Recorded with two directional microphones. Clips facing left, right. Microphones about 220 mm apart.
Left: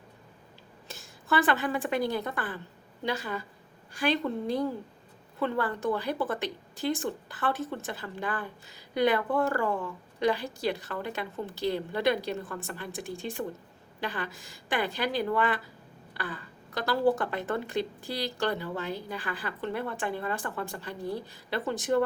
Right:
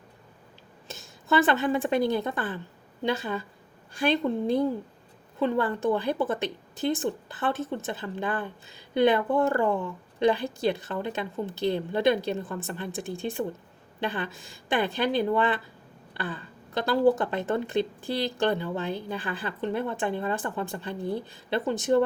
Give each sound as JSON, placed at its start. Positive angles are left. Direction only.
{"t": 0.9, "sound": "a woman's voice", "side_deg": -25}
{"t": 5.4, "sound": "a woman's voice", "side_deg": -20}